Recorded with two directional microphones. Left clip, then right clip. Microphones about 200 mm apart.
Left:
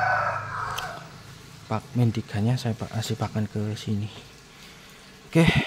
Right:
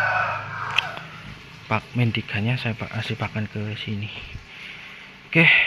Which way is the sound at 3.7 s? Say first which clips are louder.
Right 3 dB; 25° left (ahead or behind).